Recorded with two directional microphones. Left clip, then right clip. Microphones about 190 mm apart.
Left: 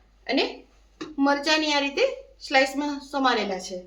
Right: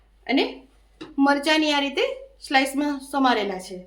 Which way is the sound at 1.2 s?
40° right (ahead or behind).